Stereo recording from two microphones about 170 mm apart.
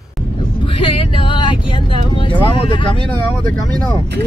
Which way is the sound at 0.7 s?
30° left (ahead or behind).